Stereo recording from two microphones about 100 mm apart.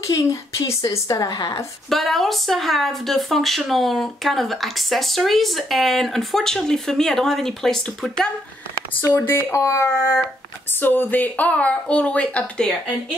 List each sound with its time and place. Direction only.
0.0 s a woman's voice: 35° left (ahead or behind)
1.9 s speech: centre (ahead or behind)
9.1 s speech: 25° left (ahead or behind)